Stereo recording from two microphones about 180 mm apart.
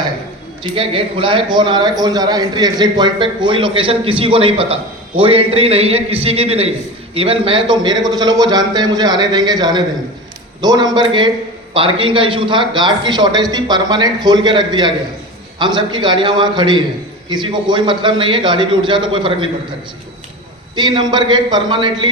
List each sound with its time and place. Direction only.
0.6 s a man's voice: 30° right (ahead or behind)
20.7 s a man's voice: 25° right (ahead or behind)